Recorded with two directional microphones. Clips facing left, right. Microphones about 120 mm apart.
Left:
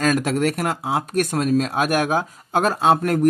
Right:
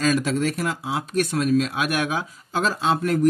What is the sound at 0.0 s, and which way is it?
Speech, 55° left (ahead or behind).